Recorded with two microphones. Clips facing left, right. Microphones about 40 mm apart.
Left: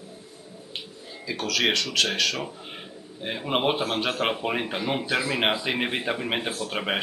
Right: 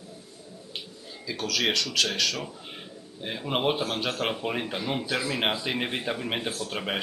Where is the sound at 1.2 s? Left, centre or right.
Left.